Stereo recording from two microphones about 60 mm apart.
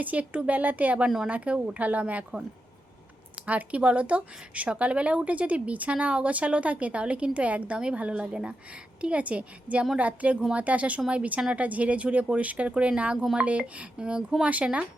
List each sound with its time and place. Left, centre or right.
0.0 s speech: right
3.4 s speech: right